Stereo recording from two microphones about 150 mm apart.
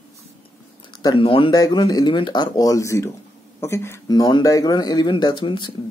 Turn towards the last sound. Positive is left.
turn(degrees=35)  # may be behind; listen again after turning